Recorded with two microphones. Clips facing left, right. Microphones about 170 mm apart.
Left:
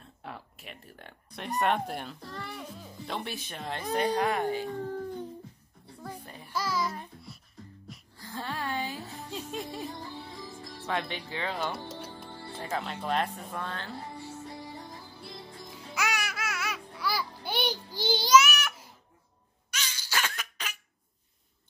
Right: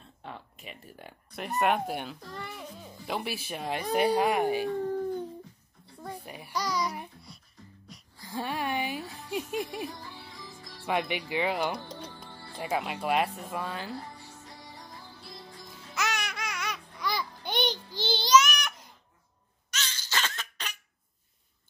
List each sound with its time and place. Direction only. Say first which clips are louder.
0.2 s speech: even; centre (ahead or behind); by 4.6 s 15° right (ahead or behind)
6.1 s a sound: right 3 dB; 10° right (ahead or behind)
6.5 s babbling: even; centre (ahead or behind)
7.3 s music: left 3 dB; centre (ahead or behind)
8.2 s a sound: right 3 dB; 15° right (ahead or behind)
10.9 s speech: right 4 dB; 15° right (ahead or behind)
11.9 s music: left 1 dB; 5° left (ahead or behind)
12.5 s speech: right 3 dB; 10° right (ahead or behind)
15.9 s babbling: even; 10° left (ahead or behind)
19.7 s a sound: even; 10° left (ahead or behind)